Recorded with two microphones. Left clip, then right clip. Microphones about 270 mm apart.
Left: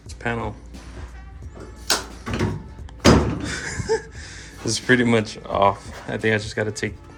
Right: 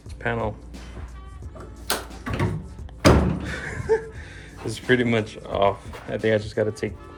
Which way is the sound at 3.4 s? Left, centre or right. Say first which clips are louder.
Even; centre.